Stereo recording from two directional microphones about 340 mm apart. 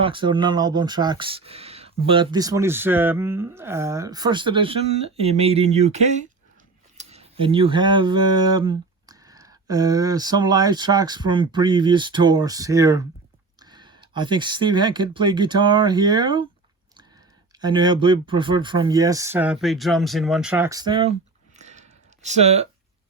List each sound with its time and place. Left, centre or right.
0.0 s speech: centre
17.6 s speech: centre
21.6 s a sound: centre